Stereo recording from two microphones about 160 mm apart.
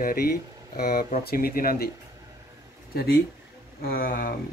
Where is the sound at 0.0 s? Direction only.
70° left (ahead or behind).